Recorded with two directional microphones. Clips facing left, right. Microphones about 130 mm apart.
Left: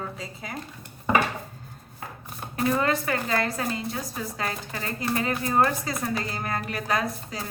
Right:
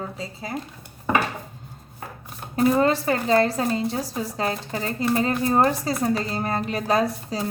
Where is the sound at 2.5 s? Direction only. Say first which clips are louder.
Right 5 dB; 30° right (ahead or behind).